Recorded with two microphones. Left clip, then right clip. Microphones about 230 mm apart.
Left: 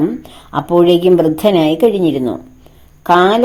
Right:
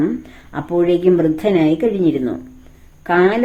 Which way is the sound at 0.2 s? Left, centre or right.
Centre.